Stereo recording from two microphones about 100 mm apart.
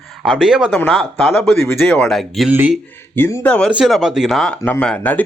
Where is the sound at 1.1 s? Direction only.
25° left (ahead or behind).